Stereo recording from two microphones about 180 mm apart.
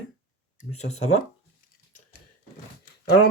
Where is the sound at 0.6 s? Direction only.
40° left (ahead or behind).